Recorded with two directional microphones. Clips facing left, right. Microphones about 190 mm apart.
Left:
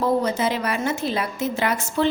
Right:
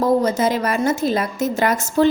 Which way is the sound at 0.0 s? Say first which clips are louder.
Right 4 dB; 45° right (ahead or behind).